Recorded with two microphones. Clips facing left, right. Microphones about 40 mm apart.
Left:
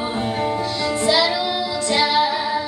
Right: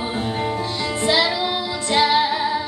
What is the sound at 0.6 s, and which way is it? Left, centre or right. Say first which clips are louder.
Music: left 2 dB; right.